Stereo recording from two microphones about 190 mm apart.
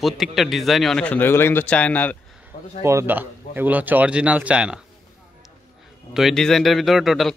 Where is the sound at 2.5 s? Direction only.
30° left (ahead or behind).